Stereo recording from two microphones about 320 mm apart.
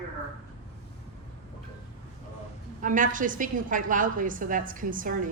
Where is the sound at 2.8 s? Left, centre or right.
Right.